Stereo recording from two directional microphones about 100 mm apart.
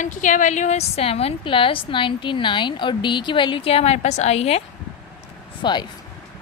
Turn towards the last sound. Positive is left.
turn(degrees=50)  # may be behind; listen again after turning